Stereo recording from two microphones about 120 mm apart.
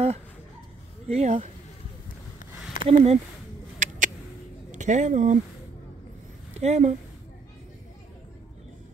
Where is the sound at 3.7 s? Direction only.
90° right.